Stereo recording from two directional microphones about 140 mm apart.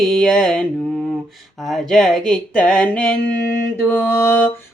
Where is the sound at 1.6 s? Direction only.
Centre (ahead or behind).